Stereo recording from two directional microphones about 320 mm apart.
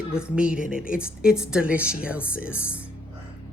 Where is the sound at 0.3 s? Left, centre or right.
Centre.